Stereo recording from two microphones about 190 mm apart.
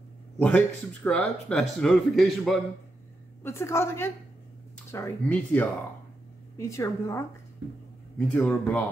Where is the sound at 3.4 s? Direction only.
15° left (ahead or behind).